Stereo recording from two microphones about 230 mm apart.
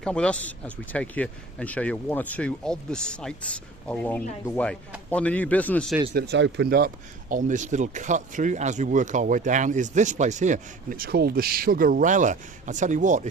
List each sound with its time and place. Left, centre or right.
0.0 s speech: centre
6.1 s speech: right